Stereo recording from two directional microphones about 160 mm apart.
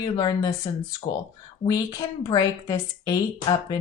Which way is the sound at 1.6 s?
25° left (ahead or behind).